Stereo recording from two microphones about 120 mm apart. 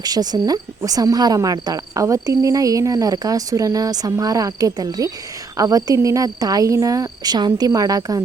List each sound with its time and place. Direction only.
0.0 s speech: 35° right (ahead or behind)